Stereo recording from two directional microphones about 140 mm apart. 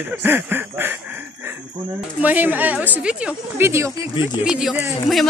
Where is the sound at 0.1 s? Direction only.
15° right (ahead or behind).